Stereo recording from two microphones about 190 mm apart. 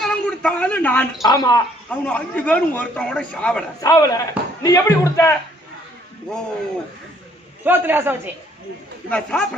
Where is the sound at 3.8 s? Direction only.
20° left (ahead or behind).